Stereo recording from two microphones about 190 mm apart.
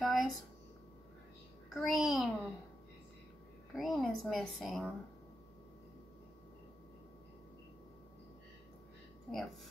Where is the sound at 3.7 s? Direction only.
Centre (ahead or behind).